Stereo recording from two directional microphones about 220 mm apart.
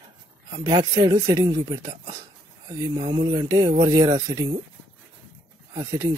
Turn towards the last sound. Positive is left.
turn(degrees=-15)  # may be behind; listen again after turning